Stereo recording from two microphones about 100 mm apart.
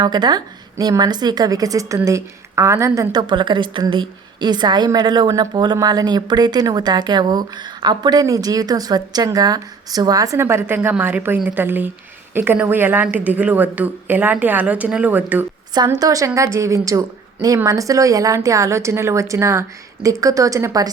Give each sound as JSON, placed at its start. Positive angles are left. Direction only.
{"t": 0.0, "sound": "a woman's voice", "side_deg": -45}
{"t": 10.4, "sound": "a woman's voice", "side_deg": -25}
{"t": 15.7, "sound": "speech", "side_deg": -40}